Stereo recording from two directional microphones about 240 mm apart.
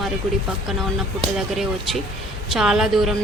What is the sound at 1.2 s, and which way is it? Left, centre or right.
Speech, centre.